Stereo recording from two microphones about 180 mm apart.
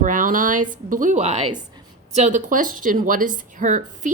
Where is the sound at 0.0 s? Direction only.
45° right (ahead or behind).